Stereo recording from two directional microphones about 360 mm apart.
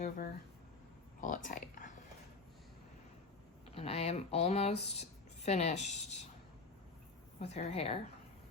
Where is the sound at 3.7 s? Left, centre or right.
Centre.